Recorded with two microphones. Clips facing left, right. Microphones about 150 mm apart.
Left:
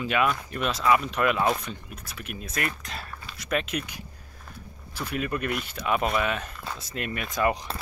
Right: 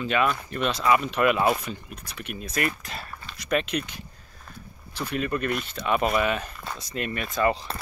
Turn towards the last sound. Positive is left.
turn(degrees=10)  # may be behind; listen again after turning